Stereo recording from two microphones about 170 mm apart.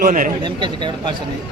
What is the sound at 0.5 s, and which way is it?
Speech, 25° right (ahead or behind).